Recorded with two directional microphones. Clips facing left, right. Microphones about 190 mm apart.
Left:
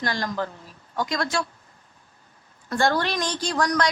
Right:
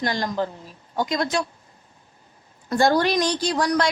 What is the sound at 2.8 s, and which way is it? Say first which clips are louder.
Speech: right 4 dB; 15° right (ahead or behind).